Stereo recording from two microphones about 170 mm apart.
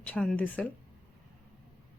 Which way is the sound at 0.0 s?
5° left (ahead or behind).